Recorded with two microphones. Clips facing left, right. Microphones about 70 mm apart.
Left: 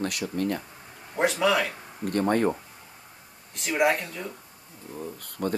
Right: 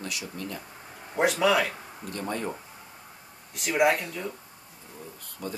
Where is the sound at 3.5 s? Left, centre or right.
Centre.